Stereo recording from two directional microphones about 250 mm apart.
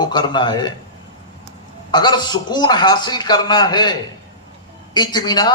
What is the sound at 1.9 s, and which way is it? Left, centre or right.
A man's voice, centre.